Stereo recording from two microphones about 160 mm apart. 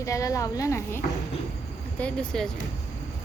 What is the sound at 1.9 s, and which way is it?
Child singing, 5° left (ahead or behind).